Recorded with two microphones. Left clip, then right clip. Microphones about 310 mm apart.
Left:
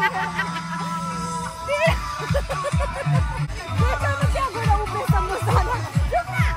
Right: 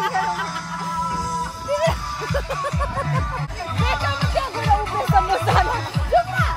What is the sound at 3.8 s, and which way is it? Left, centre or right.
Music, right.